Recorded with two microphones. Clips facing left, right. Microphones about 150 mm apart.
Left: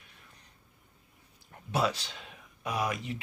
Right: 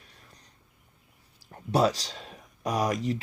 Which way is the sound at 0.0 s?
35° right (ahead or behind).